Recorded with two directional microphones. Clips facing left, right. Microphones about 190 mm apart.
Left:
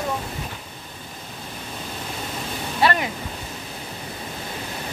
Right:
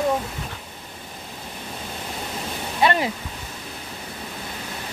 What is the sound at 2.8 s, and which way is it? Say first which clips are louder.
Waterfall: right 1 dB; 25° right (ahead or behind).